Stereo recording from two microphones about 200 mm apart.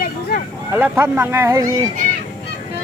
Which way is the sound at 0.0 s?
50° left (ahead or behind).